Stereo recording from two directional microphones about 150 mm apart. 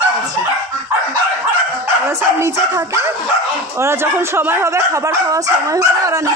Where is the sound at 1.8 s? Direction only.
20° right (ahead or behind).